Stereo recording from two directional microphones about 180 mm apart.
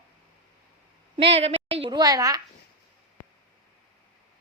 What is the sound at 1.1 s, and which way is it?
A woman's voice, 35° right (ahead or behind).